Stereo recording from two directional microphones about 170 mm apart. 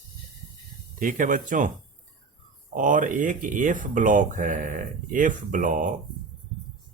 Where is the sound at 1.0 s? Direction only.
50° right (ahead or behind).